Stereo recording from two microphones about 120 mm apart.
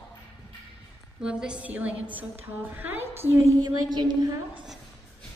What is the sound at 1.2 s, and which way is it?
A woman's voice, 5° right (ahead or behind).